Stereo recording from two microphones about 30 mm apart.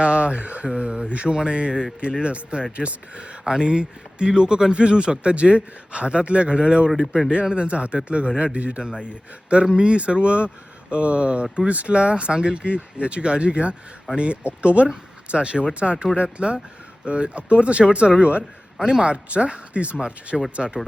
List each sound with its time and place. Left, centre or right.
0.0 s speech: right
3.4 s speech: right
8.8 s speech: right
18.9 s speech: right
19.1 s speech: right
20.6 s speech: centre